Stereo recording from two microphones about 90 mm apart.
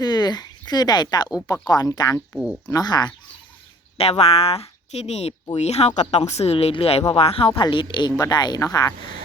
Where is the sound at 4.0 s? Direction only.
90° left.